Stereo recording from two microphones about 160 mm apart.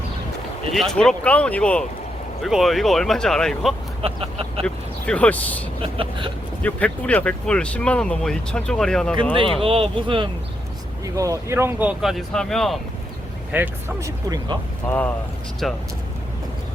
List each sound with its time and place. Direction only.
0.7 s speech: centre (ahead or behind)
4.0 s speech: 35° right (ahead or behind)
4.6 s speech: 5° left (ahead or behind)
5.8 s speech: 35° right (ahead or behind)
6.6 s speech: 10° left (ahead or behind)
9.3 s speech: 35° right (ahead or behind)
11.0 s speech: 20° right (ahead or behind); by 12.8 s centre (ahead or behind)
13.5 s speech: 15° right (ahead or behind)
14.8 s speech: 10° left (ahead or behind)